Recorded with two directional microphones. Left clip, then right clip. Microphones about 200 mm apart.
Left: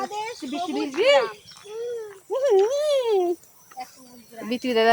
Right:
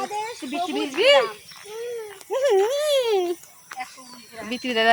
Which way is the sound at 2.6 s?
10° left (ahead or behind).